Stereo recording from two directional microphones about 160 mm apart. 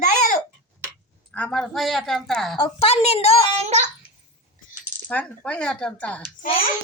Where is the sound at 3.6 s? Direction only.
45° right (ahead or behind).